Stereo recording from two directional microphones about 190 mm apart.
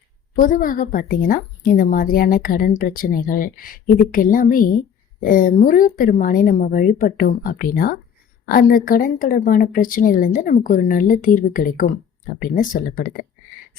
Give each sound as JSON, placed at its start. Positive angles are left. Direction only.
{"t": 0.3, "sound": "a woman's voice", "side_deg": 45}